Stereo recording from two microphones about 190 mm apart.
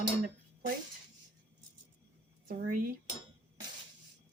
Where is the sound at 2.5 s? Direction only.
50° right (ahead or behind).